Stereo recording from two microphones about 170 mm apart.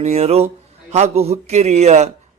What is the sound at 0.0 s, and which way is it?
A man's voice, 40° right (ahead or behind).